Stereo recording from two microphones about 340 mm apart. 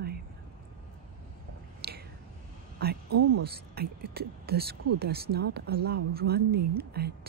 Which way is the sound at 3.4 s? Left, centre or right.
Right.